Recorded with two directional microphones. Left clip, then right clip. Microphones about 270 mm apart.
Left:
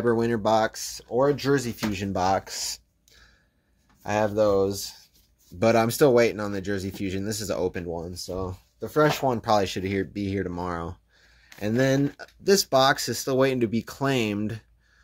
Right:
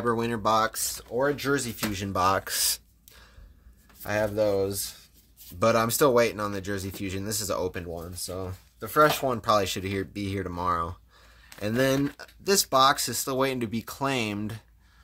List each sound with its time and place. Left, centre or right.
0.0 s speech: centre
2.4 s speech: centre
4.0 s speech: centre